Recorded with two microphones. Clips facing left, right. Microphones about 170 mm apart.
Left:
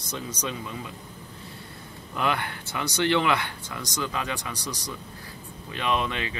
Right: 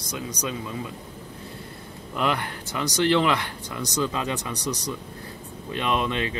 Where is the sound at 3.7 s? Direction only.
20° right (ahead or behind).